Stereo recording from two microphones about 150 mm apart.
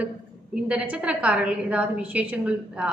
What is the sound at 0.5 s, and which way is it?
A woman's voice, 10° right (ahead or behind).